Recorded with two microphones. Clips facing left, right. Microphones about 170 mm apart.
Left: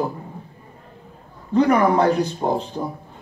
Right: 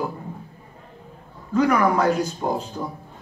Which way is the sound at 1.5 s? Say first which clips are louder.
Left 3 dB; 30° left (ahead or behind).